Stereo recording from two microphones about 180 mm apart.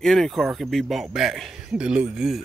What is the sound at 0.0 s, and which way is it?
Speech, centre (ahead or behind).